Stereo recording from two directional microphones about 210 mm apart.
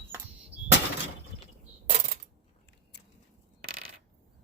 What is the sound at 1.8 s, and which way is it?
Coin, 40° right (ahead or behind).